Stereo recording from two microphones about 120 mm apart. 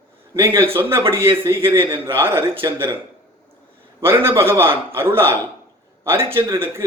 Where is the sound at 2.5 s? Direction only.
45° right (ahead or behind).